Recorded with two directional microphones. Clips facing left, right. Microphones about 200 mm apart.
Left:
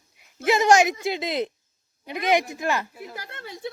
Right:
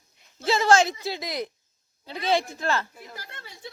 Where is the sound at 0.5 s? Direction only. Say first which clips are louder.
Left 2 dB; 15° left (ahead or behind).